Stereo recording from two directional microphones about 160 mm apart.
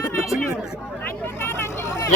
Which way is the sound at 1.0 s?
15° left (ahead or behind).